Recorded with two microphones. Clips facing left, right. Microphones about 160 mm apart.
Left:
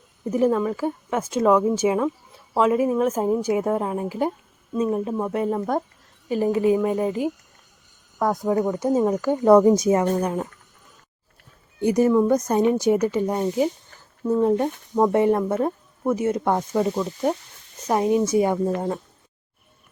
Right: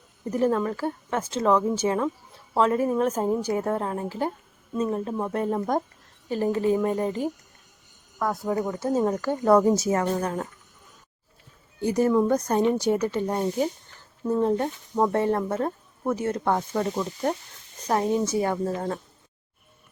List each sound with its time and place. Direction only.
0.3 s a woman's voice: 10° left (ahead or behind)
8.2 s speech: 20° left (ahead or behind)
8.4 s a woman's voice: 5° left (ahead or behind)
11.8 s a woman's voice: 15° left (ahead or behind)